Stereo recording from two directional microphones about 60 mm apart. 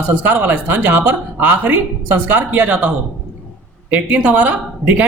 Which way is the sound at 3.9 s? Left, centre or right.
Right.